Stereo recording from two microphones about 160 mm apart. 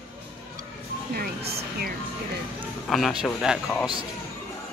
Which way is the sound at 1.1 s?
75° right (ahead or behind).